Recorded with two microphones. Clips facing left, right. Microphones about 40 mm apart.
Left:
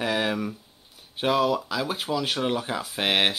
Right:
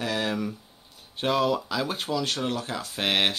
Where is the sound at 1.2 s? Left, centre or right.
Centre.